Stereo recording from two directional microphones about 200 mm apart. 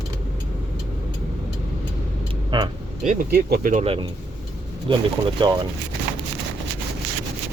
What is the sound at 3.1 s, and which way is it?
Speech, 45° right (ahead or behind).